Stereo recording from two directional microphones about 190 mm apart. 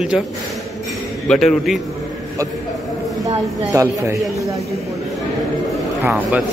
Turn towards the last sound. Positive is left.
turn(degrees=-10)  # may be behind; listen again after turning